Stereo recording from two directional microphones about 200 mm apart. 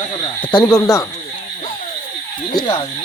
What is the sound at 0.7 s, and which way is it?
Speech, 15° left (ahead or behind).